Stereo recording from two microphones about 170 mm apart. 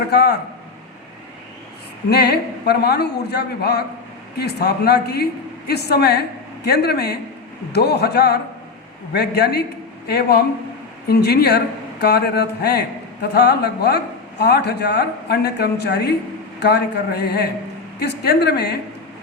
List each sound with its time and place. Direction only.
0.1 s a woman's voice: 75° left (ahead or behind)
2.0 s a woman's voice: 75° left (ahead or behind)